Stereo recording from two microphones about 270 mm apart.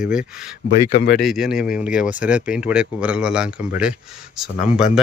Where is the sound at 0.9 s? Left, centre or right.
Left.